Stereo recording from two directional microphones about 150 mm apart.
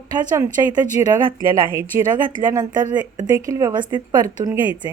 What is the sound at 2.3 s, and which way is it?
Speech, 25° right (ahead or behind).